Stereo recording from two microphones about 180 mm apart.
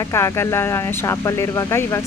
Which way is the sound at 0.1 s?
15° left (ahead or behind).